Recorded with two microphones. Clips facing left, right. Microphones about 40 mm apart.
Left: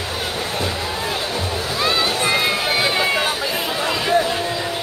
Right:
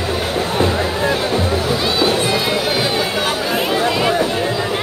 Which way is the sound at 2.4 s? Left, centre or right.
Centre.